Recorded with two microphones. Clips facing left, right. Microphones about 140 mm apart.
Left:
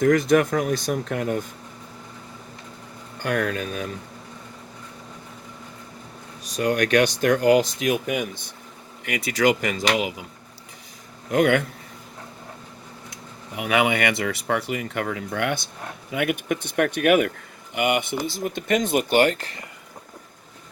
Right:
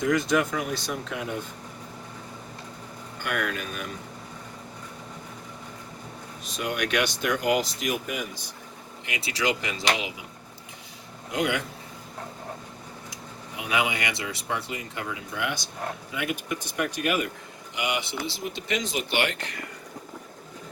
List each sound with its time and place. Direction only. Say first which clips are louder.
0.0 s speech: left 6 dB; 55° left (ahead or behind)
3.2 s speech: left 6 dB; 40° left (ahead or behind)
6.5 s speech: left 8 dB; 45° left (ahead or behind)
11.3 s speech: left 8 dB; 55° left (ahead or behind)
13.6 s speech: left 6 dB; 60° left (ahead or behind); by 19.6 s 35° left (ahead or behind)